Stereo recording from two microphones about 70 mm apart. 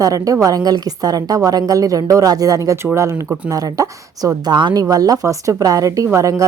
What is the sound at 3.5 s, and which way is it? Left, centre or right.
Speech, right.